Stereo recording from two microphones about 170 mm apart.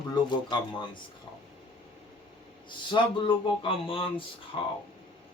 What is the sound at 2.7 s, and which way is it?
A man's voice, 30° left (ahead or behind).